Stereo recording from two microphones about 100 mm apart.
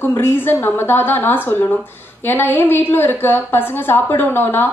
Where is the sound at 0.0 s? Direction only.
25° left (ahead or behind).